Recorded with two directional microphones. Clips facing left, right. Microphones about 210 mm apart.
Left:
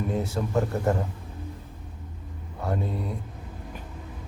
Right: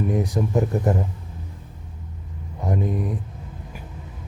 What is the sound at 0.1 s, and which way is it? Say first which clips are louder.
Speech: right 4 dB; 15° right (ahead or behind).